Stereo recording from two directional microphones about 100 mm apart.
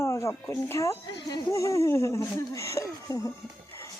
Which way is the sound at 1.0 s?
45° left (ahead or behind).